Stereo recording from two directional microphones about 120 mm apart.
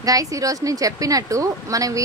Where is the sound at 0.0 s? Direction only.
30° right (ahead or behind).